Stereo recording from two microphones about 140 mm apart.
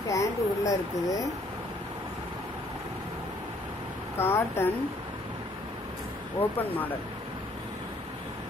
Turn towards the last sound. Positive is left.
turn(degrees=15)  # may be behind; listen again after turning